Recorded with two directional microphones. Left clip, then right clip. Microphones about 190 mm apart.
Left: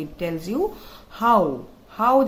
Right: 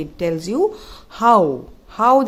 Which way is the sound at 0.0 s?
50° right (ahead or behind).